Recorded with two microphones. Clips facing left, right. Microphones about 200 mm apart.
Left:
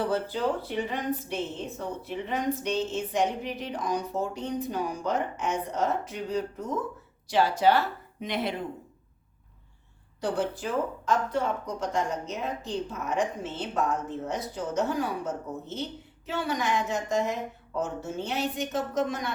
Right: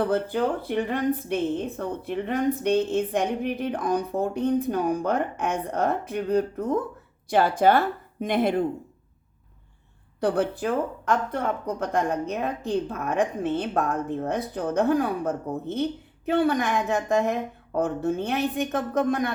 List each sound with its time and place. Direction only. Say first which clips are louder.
0.0 s speech: right 4 dB; 55° right (ahead or behind)
10.2 s speech: right 5 dB; 60° right (ahead or behind)